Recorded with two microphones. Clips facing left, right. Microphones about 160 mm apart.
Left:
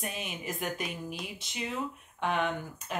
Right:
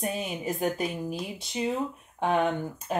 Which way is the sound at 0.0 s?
35° right (ahead or behind).